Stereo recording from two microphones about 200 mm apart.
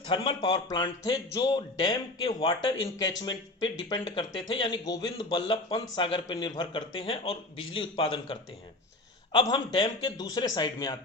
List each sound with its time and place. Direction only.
0.1 s speech: 25° left (ahead or behind)